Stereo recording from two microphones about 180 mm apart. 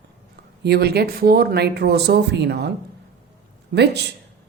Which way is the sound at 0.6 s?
65° right (ahead or behind).